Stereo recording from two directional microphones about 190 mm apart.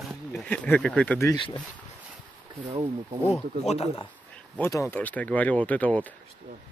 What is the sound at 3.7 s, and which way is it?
Speech, 35° left (ahead or behind).